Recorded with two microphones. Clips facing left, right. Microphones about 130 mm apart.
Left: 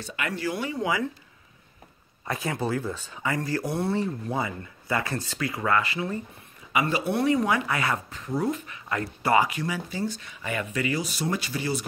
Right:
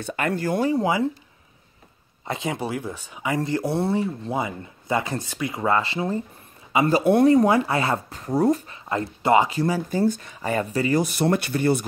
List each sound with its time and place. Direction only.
0.0 s speech: 50° right (ahead or behind); by 1.0 s 30° right (ahead or behind)
2.2 s speech: 20° right (ahead or behind)
3.3 s speech: 25° right (ahead or behind)
7.0 s speech: 45° right (ahead or behind); by 9.6 s 25° right (ahead or behind)
9.6 s speech: 35° right (ahead or behind)
9.9 s speech: 50° right (ahead or behind); by 11.0 s 35° right (ahead or behind)
11.0 s speech: 55° right (ahead or behind)